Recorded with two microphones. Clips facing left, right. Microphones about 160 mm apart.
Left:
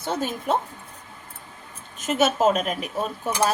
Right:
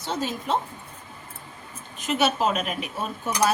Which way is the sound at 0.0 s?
50° left (ahead or behind).